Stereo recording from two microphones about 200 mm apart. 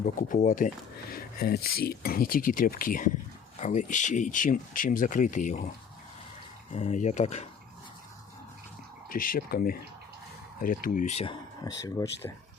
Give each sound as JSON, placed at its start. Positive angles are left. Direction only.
{"t": 0.0, "sound": "speech", "side_deg": 40}
{"t": 6.7, "sound": "speech", "side_deg": 35}
{"t": 9.0, "sound": "speech", "side_deg": 45}
{"t": 11.8, "sound": "speech", "side_deg": 15}